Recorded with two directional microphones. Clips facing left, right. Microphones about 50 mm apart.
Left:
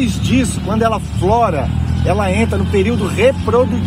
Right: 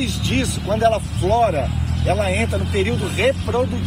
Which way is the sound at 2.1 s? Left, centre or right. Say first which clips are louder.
Left 4 dB; left.